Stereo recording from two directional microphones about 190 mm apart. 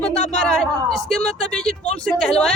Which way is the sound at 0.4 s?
5° left (ahead or behind).